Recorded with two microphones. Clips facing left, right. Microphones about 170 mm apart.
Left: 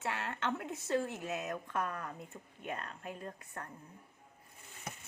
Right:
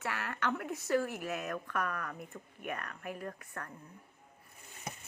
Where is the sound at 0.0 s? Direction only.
25° left (ahead or behind).